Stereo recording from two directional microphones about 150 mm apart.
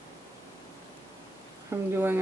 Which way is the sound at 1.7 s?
15° right (ahead or behind).